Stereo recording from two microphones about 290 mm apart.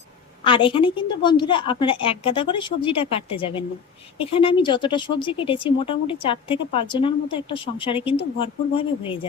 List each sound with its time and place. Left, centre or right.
0.4 s a woman's voice: centre